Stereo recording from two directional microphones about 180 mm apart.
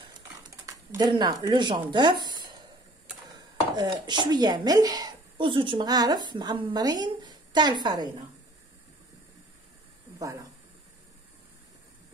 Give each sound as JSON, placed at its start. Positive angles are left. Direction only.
{"t": 0.7, "sound": "speech", "side_deg": -20}
{"t": 10.1, "sound": "speech", "side_deg": -20}